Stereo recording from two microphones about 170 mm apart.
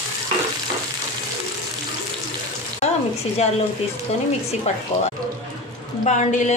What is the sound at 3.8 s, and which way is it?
Speech, 40° left (ahead or behind).